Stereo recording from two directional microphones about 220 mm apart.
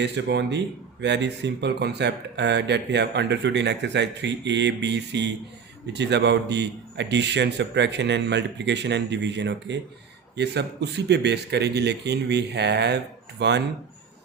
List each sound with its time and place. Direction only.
0.0 s speech: 50° right (ahead or behind)